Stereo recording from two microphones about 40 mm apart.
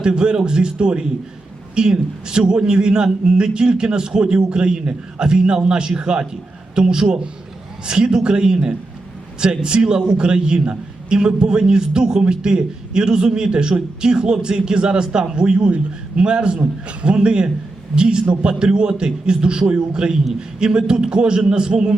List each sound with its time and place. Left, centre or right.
0.0 s a man's voice: right